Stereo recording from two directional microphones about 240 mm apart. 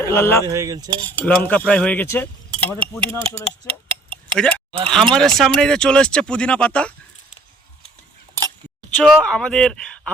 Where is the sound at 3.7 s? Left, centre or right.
Right.